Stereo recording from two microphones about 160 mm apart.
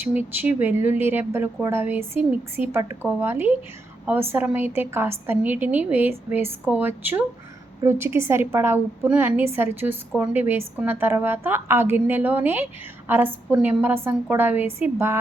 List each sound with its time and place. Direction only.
0.0 s speech: 10° right (ahead or behind)